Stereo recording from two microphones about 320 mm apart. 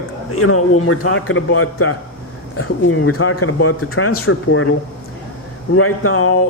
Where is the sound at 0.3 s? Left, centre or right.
Left.